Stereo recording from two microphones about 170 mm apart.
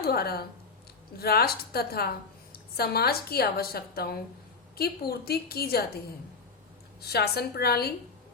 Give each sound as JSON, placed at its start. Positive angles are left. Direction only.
{"t": 0.0, "sound": "a woman's voice", "side_deg": 65}
{"t": 7.0, "sound": "a woman's voice", "side_deg": 70}